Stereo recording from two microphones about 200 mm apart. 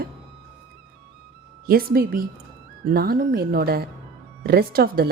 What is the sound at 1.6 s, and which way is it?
Speech, 50° right (ahead or behind).